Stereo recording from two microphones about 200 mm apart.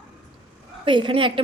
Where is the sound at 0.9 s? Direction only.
25° right (ahead or behind).